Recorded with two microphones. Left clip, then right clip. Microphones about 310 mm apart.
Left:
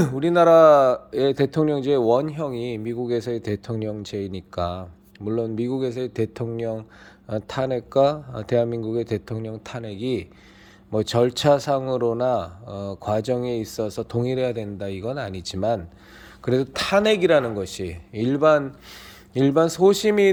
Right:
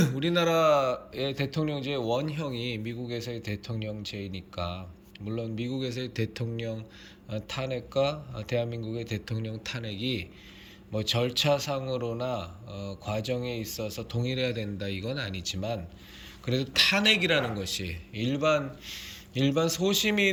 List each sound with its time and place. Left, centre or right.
0.0 s speech: centre